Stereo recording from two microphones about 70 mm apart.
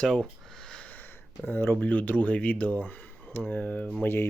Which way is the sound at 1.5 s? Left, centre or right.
Left.